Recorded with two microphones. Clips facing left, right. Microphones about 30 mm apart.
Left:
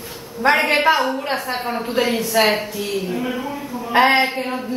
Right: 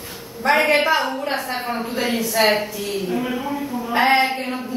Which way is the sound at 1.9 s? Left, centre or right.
Left.